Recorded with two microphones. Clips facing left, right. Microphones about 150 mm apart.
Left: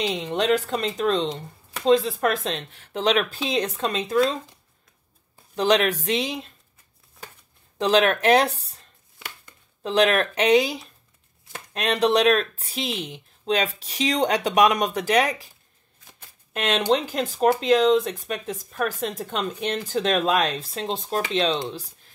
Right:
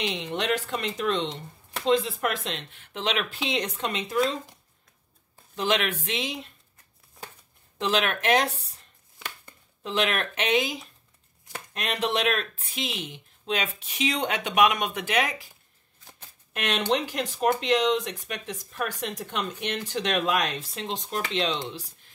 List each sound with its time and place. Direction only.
0.0 s speech: 40° left (ahead or behind)
5.6 s speech: 35° left (ahead or behind)
7.7 s speech: 35° left (ahead or behind)
9.8 s speech: 35° left (ahead or behind)
17.1 s speech: 35° left (ahead or behind)